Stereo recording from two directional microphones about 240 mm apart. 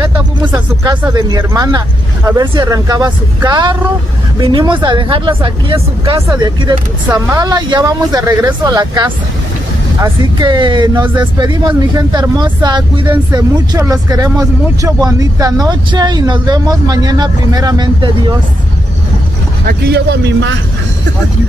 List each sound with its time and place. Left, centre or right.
0.0 s a sound: centre
2.2 s speech: centre
19.6 s a man's voice: right